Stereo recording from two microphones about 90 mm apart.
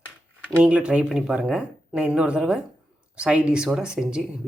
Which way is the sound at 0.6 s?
10° right (ahead or behind).